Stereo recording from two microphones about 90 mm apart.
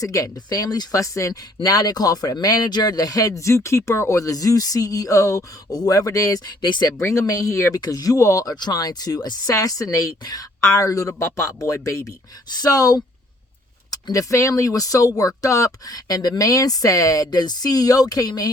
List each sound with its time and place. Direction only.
0.0 s speech: 40° left (ahead or behind)
6.6 s speech: 55° left (ahead or behind)
7.0 s speech: 35° left (ahead or behind)
8.5 s speech: 50° left (ahead or behind); by 12.1 s 35° left (ahead or behind)
12.5 s speech: 45° left (ahead or behind)